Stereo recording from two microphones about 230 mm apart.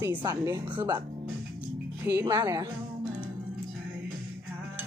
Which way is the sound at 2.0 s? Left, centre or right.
Centre.